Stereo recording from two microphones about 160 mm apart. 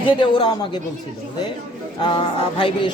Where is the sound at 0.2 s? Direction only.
30° left (ahead or behind).